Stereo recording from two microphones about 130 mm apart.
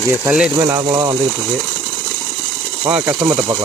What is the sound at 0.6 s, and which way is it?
Speech, 40° right (ahead or behind).